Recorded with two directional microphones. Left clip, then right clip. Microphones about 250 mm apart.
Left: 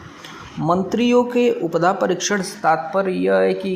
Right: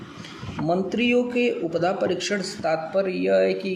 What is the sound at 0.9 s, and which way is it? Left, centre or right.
A man's voice, centre.